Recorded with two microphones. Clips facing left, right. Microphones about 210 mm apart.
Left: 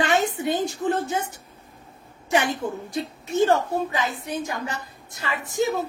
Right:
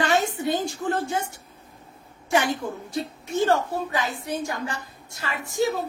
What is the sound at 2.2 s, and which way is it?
A woman's voice, 20° left (ahead or behind).